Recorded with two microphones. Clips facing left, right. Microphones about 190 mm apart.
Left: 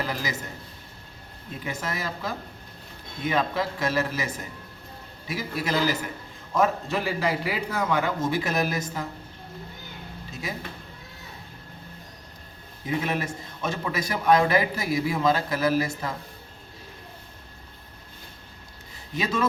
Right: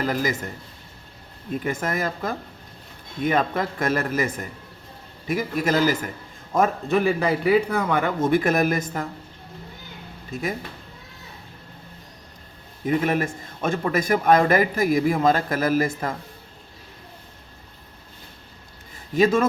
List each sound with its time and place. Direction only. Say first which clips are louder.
0.0 s speech: right 6 dB; 50° right (ahead or behind)
1.6 s a man's voice: right 5 dB; 50° right (ahead or behind)
10.3 s a man's voice: right 8 dB; 50° right (ahead or behind)
12.8 s a man's voice: right 6 dB; 50° right (ahead or behind)
19.1 s a man's voice: right 8 dB; 50° right (ahead or behind)